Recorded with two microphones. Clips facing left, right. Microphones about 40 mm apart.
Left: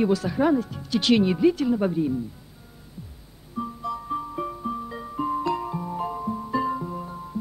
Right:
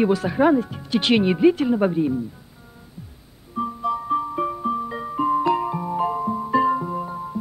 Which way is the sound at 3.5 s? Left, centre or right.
Right.